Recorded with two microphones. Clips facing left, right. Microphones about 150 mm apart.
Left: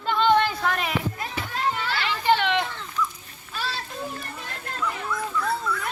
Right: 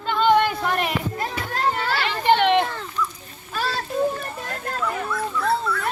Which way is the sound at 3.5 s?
45° right (ahead or behind).